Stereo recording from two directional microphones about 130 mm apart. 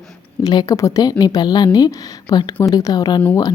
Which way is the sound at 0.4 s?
30° left (ahead or behind).